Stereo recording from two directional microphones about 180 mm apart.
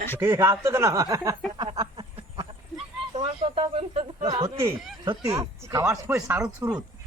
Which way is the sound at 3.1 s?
30° right (ahead or behind).